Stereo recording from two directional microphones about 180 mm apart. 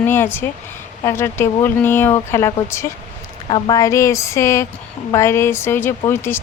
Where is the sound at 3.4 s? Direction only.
25° left (ahead or behind).